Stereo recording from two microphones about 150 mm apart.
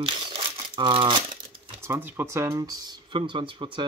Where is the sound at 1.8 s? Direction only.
15° right (ahead or behind).